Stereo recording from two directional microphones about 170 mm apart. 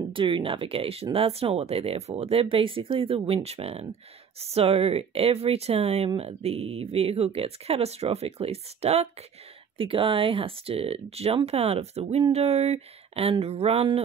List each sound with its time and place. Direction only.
0.1 s speech: 30° right (ahead or behind)